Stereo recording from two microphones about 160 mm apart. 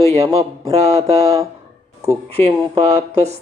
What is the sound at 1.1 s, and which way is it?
Speech, 20° right (ahead or behind).